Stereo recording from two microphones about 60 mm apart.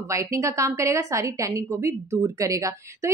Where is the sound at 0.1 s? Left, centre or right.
Right.